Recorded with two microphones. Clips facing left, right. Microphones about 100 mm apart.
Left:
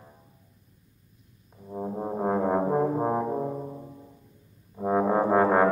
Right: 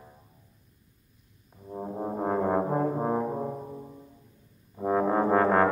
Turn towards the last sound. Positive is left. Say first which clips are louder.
# left 1 dB
turn(degrees=10)  # may be behind; listen again after turning